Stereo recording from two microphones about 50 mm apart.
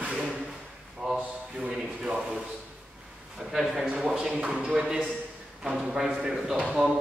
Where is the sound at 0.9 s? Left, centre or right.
Centre.